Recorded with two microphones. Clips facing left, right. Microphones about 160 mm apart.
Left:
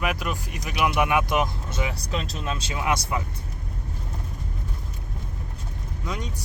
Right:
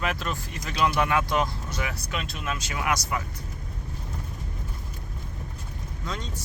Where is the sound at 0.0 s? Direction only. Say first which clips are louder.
Left 2 dB; 15° left (ahead or behind).